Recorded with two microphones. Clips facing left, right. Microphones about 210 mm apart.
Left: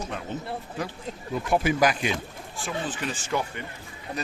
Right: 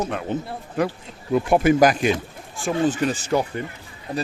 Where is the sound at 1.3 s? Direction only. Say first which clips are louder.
Right 8 dB; 55° right (ahead or behind).